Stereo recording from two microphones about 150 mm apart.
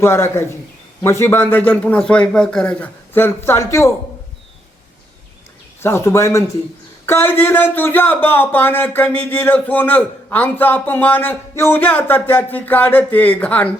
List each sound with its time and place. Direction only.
0.0 s speech: 15° left (ahead or behind)
5.8 s speech: 15° left (ahead or behind)